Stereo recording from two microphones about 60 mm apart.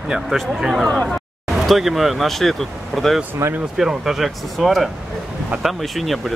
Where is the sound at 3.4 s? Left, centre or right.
Right.